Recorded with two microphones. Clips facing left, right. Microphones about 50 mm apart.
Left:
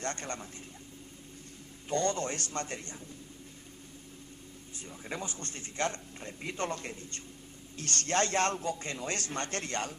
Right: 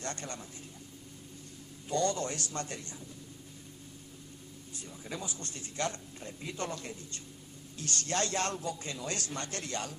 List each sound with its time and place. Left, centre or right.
0.0 s speech: left
1.9 s speech: left
4.8 s speech: left